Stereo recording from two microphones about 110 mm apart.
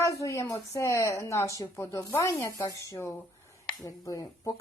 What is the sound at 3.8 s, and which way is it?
Speech, 30° left (ahead or behind).